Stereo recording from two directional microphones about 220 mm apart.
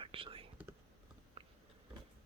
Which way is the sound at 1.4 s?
25° right (ahead or behind).